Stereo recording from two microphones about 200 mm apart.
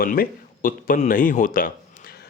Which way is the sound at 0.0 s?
45° left (ahead or behind).